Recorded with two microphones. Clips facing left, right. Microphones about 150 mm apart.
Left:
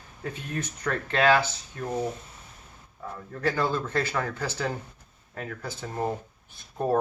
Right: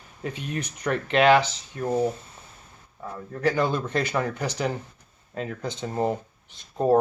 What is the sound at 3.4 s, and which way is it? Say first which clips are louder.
Speech: right 3 dB; 15° right (ahead or behind).